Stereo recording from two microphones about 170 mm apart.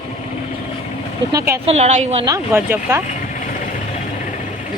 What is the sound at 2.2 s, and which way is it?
Speech, 15° right (ahead or behind).